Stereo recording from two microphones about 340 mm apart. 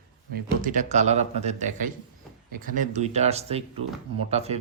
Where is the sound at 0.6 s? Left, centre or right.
Right.